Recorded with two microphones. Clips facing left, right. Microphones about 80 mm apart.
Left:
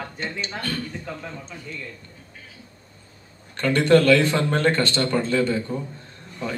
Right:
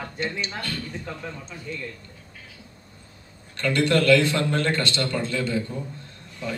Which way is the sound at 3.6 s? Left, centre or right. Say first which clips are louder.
Left 4 dB; left.